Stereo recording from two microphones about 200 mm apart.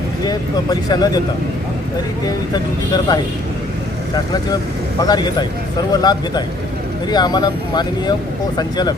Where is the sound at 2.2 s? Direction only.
20° left (ahead or behind).